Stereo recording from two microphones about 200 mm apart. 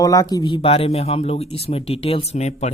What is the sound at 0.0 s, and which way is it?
Speech, 15° left (ahead or behind).